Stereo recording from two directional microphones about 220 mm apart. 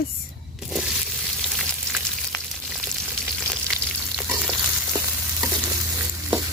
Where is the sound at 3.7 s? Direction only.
10° right (ahead or behind).